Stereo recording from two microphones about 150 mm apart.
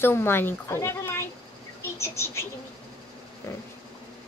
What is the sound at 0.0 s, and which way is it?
A woman's voice, 15° left (ahead or behind).